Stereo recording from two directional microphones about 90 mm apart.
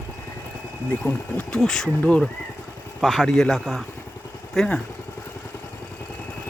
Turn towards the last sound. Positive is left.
turn(degrees=10)  # may be behind; listen again after turning